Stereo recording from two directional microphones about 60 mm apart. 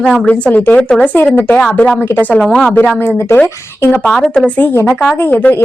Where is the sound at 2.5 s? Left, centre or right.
Centre.